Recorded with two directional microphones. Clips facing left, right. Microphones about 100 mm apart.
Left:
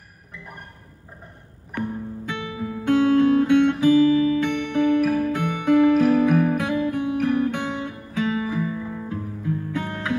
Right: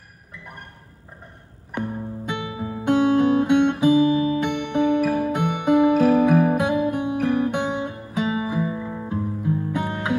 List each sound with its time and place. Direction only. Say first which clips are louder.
1.8 s music: even; 20° right (ahead or behind)